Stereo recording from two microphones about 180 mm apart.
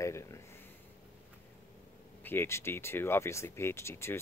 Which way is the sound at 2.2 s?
15° left (ahead or behind).